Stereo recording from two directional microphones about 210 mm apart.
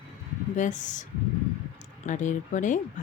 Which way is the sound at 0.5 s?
35° left (ahead or behind).